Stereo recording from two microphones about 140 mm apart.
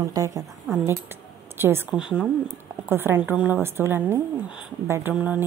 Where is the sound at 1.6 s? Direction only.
15° right (ahead or behind).